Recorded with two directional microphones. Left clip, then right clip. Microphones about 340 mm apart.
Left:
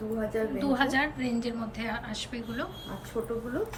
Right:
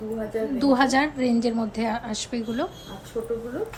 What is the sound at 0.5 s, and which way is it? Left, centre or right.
A woman's voice, centre.